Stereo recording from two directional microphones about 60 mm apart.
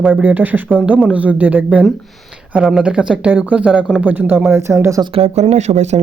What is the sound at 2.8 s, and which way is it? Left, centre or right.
Speech, centre.